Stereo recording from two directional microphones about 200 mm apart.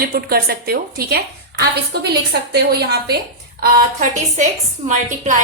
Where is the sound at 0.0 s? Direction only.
50° right (ahead or behind).